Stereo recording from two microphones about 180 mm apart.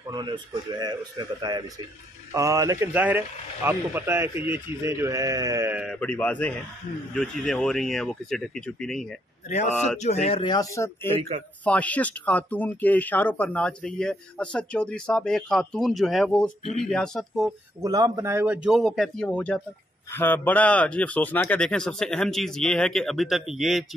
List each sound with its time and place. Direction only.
0.1 s a man's voice: 25° right (ahead or behind); by 5.9 s 10° right (ahead or behind)
5.9 s speech: 10° left (ahead or behind)
9.5 s speech: 40° left (ahead or behind)
10.4 s speech: 20° left (ahead or behind); by 17.5 s centre (ahead or behind)
17.8 s speech: 20° right (ahead or behind); by 23.9 s centre (ahead or behind)